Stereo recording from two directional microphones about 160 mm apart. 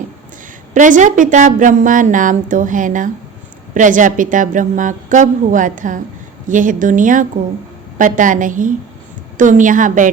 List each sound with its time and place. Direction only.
0.7 s a woman's voice: 55° right (ahead or behind)